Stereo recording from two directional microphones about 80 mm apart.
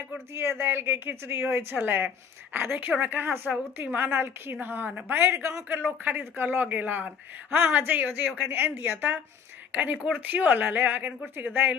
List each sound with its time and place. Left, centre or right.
0.3 s speech: right
5.7 s speech: right